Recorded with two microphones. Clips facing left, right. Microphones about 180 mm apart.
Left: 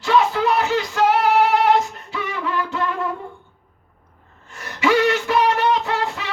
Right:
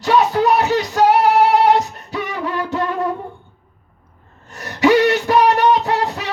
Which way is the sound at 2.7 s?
40° right (ahead or behind).